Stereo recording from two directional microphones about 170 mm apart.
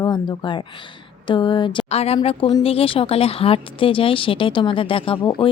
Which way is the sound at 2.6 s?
35° left (ahead or behind).